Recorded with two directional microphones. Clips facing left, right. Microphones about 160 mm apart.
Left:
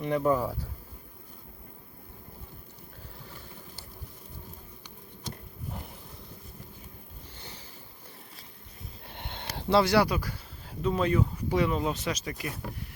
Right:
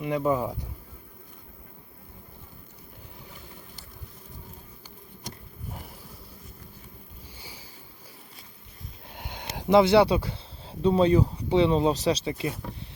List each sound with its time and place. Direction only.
0.0 s speech: 15° right (ahead or behind)
7.3 s boat: 10° right (ahead or behind)
9.0 s a sound: 5° right (ahead or behind)
9.5 s speech: 20° right (ahead or behind)